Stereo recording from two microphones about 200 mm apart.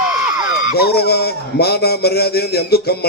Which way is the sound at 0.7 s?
50° left (ahead or behind).